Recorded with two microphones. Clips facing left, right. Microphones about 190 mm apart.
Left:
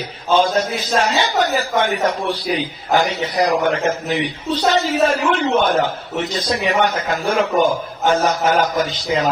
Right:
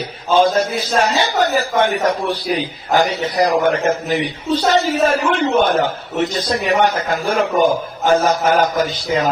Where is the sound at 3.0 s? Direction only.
40° right (ahead or behind).